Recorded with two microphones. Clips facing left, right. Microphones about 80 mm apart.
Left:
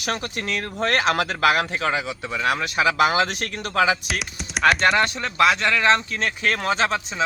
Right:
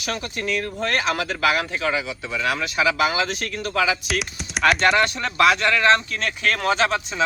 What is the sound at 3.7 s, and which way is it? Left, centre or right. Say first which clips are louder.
Speech: left 2 dB; left.